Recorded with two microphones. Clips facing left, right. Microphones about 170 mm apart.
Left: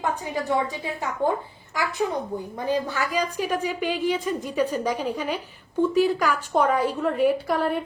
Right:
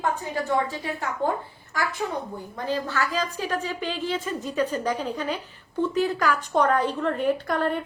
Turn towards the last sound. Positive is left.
turn(degrees=5)  # may be behind; listen again after turning